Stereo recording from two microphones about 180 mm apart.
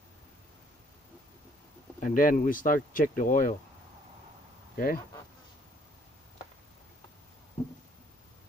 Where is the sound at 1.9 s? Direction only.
50° left (ahead or behind).